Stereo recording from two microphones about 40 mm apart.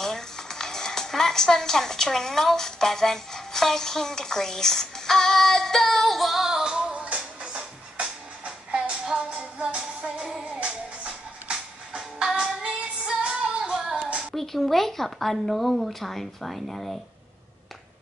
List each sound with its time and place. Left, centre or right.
0.0 s speech: centre
6.1 s child singing: centre
6.4 s music: centre
6.9 s music: right
10.1 s music: centre
14.3 s a woman's voice: centre